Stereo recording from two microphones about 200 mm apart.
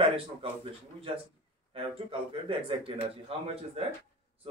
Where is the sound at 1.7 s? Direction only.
30° right (ahead or behind).